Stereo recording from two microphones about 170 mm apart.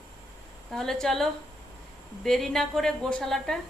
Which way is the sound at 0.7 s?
5° left (ahead or behind).